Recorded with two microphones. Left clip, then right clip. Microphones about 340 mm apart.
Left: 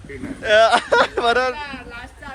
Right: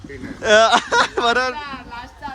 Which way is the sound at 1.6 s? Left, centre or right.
Right.